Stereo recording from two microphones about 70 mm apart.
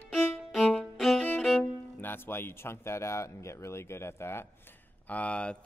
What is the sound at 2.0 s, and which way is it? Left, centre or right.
Speech, left.